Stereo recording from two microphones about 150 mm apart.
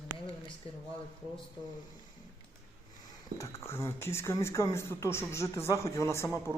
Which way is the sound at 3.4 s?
15° left (ahead or behind).